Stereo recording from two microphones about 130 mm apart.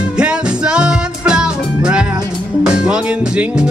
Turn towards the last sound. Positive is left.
turn(degrees=-5)  # may be behind; listen again after turning